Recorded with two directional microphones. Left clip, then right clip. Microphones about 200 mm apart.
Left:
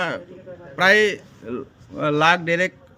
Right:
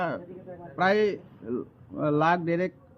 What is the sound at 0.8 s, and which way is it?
A man's voice, 15° left (ahead or behind).